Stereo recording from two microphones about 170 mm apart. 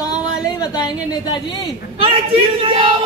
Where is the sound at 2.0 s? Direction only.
30° right (ahead or behind).